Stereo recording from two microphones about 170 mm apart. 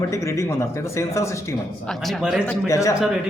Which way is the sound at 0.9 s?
15° left (ahead or behind).